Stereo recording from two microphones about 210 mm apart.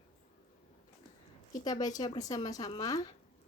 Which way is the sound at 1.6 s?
20° left (ahead or behind).